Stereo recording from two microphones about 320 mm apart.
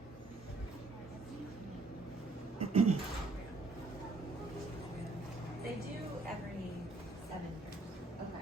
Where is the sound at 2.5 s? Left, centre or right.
Centre.